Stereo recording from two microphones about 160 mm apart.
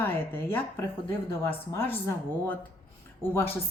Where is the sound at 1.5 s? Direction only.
10° left (ahead or behind).